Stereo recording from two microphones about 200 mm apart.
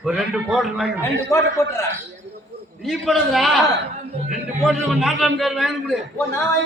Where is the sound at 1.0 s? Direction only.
15° left (ahead or behind).